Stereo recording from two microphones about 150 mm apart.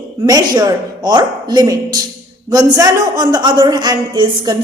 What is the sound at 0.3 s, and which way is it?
A woman's voice, 25° right (ahead or behind).